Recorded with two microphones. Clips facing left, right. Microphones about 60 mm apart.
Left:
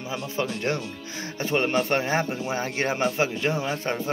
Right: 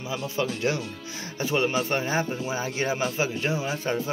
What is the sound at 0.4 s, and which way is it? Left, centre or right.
Speech, left.